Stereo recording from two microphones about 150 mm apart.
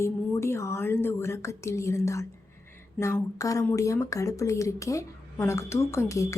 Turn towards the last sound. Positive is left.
turn(degrees=20)  # may be behind; listen again after turning